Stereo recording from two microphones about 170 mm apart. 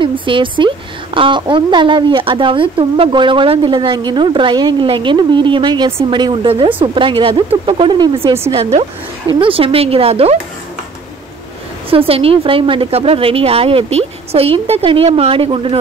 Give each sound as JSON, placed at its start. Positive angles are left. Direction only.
{"t": 0.0, "sound": "a woman's voice", "side_deg": -30}
{"t": 9.4, "sound": "a woman's voice", "side_deg": -35}
{"t": 12.1, "sound": "a woman's voice", "side_deg": -35}